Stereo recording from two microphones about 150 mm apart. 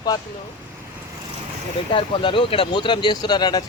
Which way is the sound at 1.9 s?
35° left (ahead or behind).